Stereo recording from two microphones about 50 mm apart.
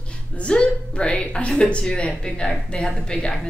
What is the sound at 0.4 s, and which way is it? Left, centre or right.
A woman's voice, centre.